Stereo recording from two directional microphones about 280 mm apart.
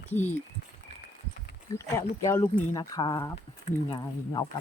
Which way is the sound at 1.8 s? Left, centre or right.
Centre.